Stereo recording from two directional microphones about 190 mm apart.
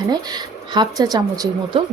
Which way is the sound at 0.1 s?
20° right (ahead or behind).